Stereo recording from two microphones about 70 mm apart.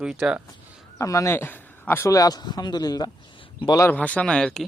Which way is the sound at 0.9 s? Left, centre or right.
Left.